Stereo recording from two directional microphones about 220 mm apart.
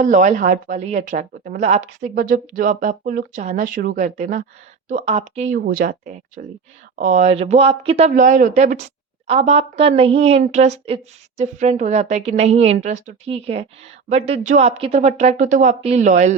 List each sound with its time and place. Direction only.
0.0 s speech: 35° right (ahead or behind)
5.5 s a woman's voice: 45° right (ahead or behind); by 8.1 s 25° right (ahead or behind)
8.1 s a woman's voice: 35° right (ahead or behind)